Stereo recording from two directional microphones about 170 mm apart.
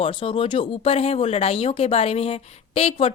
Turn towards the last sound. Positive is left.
turn(degrees=35)  # may be behind; listen again after turning